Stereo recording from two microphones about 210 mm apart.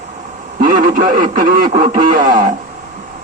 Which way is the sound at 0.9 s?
40° right (ahead or behind).